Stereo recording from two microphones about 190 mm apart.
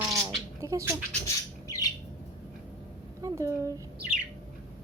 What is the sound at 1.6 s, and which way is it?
Bird, 15° left (ahead or behind).